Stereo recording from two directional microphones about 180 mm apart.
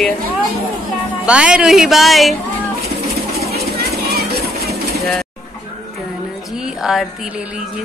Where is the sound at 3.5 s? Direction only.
60° right (ahead or behind).